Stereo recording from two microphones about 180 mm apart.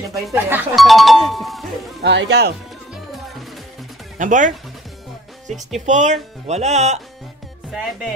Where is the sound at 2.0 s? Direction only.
70° right (ahead or behind).